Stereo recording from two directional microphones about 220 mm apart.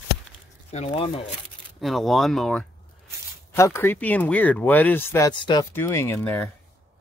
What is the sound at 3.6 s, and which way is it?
Speech, 10° left (ahead or behind).